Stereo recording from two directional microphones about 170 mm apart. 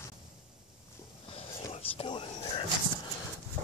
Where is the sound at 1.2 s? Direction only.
35° left (ahead or behind).